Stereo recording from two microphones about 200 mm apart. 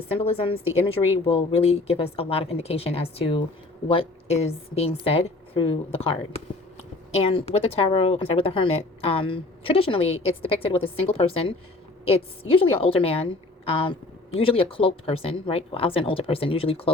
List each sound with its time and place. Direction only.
0.1 s speech: 30° left (ahead or behind)